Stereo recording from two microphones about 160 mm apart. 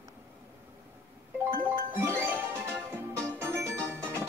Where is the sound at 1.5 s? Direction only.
15° right (ahead or behind).